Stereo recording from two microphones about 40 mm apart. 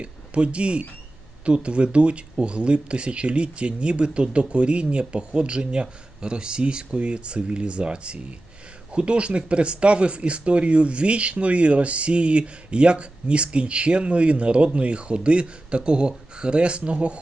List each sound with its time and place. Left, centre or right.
0.0 s speech: right